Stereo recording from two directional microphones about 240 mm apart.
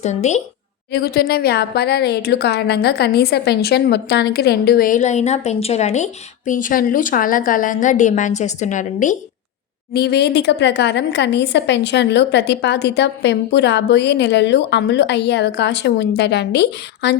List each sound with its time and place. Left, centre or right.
0.0 s a woman's voice: left
0.9 s a woman's voice: left
9.9 s a woman's voice: left